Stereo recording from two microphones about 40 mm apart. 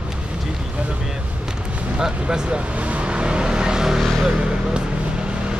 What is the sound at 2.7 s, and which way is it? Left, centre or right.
Vehicle, right.